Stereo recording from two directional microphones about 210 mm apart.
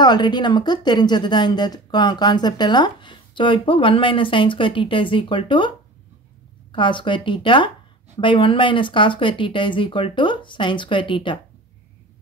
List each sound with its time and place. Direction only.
0.0 s speech: 20° left (ahead or behind)
6.7 s speech: 25° left (ahead or behind)